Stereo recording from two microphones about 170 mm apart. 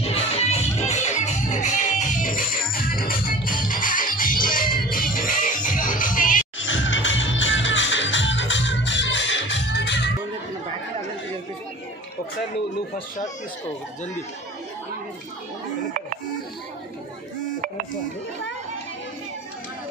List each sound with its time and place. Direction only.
0.0 s music: 35° left (ahead or behind)
6.6 s music: 90° left